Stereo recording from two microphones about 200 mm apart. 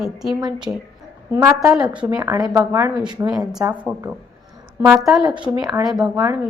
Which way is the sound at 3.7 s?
5° right (ahead or behind).